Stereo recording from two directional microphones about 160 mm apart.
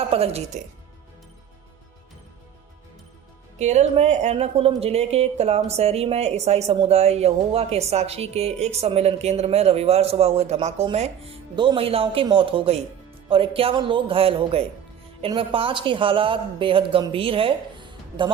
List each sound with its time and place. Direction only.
0.1 s speech: 40° right (ahead or behind)
3.6 s speech: 45° right (ahead or behind)
11.5 s speech: 30° right (ahead or behind)